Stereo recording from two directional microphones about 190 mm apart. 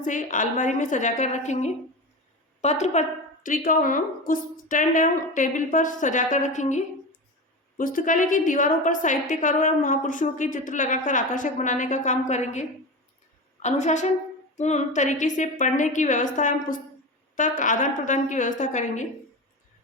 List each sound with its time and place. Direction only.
0.0 s a woman's voice: 40° left (ahead or behind)